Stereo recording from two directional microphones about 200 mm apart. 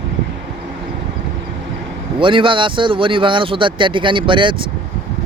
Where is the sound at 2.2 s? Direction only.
25° right (ahead or behind).